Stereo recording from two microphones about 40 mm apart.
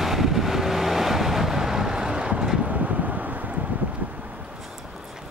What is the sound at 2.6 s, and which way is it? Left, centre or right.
Wind, right.